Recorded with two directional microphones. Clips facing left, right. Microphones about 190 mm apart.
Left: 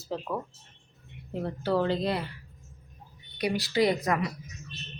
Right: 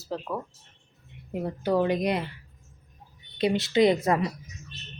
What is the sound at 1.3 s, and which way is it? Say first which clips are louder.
Speech: right 2 dB; 15° right (ahead or behind).